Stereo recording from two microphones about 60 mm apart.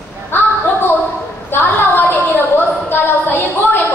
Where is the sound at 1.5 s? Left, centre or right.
Left.